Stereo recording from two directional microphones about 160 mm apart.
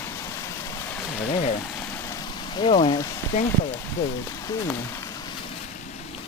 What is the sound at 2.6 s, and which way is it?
Speech, 35° left (ahead or behind).